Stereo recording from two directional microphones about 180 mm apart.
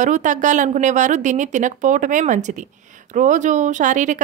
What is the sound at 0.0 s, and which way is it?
A woman's voice, 45° right (ahead or behind).